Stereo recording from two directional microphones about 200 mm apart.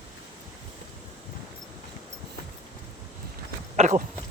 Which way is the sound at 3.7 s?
35° right (ahead or behind).